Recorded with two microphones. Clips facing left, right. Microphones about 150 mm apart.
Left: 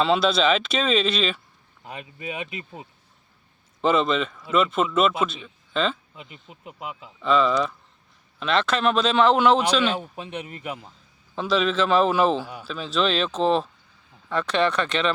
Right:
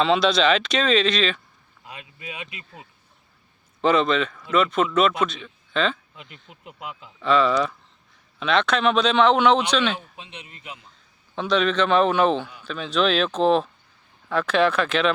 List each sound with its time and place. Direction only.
0.0 s speech: 5° left (ahead or behind)
1.8 s speech: 40° left (ahead or behind)
3.8 s speech: centre (ahead or behind)
9.9 s speech: 50° left (ahead or behind)
11.3 s speech: 5° left (ahead or behind)